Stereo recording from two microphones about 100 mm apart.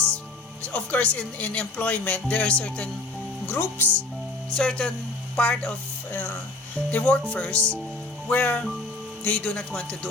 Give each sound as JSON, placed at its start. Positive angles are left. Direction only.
{"t": 0.6, "sound": "a woman's voice", "side_deg": 15}
{"t": 3.4, "sound": "speech", "side_deg": 20}
{"t": 4.5, "sound": "a woman's voice", "side_deg": 10}
{"t": 6.9, "sound": "a woman's voice", "side_deg": 15}